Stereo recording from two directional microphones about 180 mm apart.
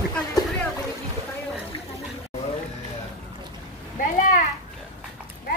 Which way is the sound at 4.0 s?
45° left (ahead or behind).